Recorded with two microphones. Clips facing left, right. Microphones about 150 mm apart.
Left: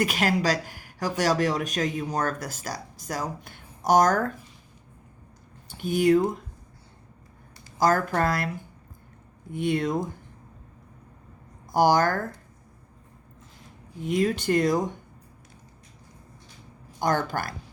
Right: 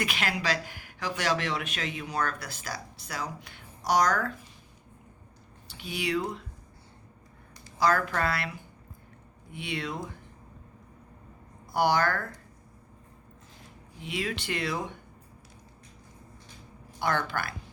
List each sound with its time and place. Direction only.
0.0 s speech: 45° left (ahead or behind)
5.6 s speech: 45° left (ahead or behind)
7.8 s speech: 45° left (ahead or behind)
11.7 s speech: 45° left (ahead or behind)
14.0 s speech: 45° left (ahead or behind)
17.0 s speech: 45° left (ahead or behind)